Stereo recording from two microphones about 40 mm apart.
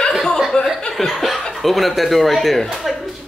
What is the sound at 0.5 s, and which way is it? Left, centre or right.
Speech, centre.